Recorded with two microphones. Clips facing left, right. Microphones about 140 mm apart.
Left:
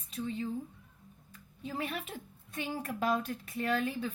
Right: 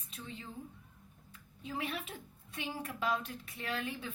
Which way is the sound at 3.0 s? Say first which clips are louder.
Left 4 dB; 40° left (ahead or behind).